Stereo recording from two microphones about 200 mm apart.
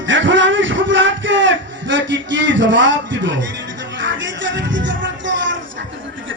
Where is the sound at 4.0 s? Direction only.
65° right (ahead or behind).